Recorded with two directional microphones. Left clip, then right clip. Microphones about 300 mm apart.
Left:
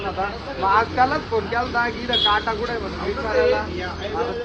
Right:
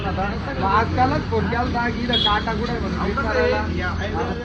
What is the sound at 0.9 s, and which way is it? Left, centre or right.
Speech, centre.